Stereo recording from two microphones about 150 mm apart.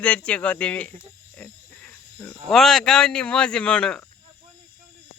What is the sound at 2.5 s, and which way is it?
Speech, centre (ahead or behind).